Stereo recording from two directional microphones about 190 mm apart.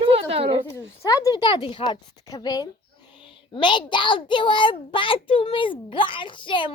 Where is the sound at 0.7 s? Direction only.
15° left (ahead or behind).